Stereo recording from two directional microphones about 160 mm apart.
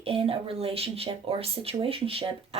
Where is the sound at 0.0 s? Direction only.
35° right (ahead or behind).